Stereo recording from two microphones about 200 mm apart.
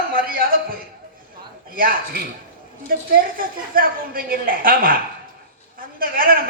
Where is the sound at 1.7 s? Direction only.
45° right (ahead or behind).